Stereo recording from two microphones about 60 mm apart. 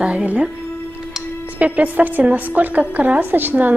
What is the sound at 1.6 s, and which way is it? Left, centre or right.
A woman's voice, right.